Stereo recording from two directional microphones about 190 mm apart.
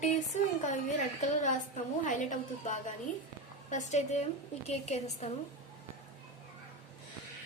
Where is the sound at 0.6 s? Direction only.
40° left (ahead or behind).